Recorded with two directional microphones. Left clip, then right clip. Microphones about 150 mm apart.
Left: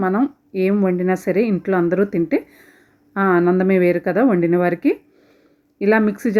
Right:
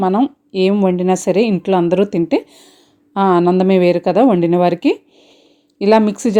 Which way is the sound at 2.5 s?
20° right (ahead or behind).